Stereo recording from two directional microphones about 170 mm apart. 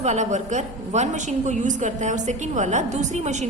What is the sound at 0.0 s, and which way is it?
A woman's voice, 45° right (ahead or behind).